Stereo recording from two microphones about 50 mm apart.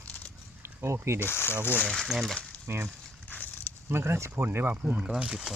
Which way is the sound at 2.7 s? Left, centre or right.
Right.